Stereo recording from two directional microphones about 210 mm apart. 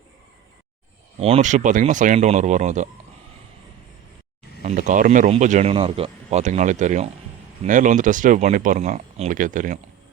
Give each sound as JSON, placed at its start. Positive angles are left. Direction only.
{"t": 1.2, "sound": "speech", "side_deg": -30}
{"t": 4.6, "sound": "speech", "side_deg": -35}